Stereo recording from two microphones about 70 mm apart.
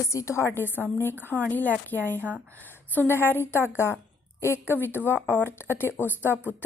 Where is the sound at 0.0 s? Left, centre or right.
Left.